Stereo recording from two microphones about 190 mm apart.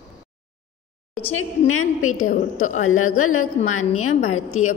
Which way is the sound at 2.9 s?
90° left.